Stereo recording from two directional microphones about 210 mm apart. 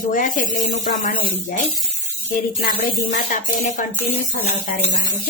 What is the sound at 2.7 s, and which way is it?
Speech, 35° left (ahead or behind).